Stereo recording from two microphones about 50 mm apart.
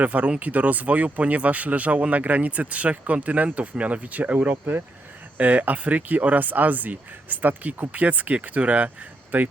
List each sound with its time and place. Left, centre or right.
0.0 s speech: right
5.4 s speech: right